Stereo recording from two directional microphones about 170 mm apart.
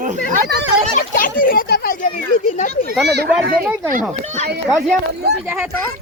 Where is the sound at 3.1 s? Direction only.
70° right (ahead or behind).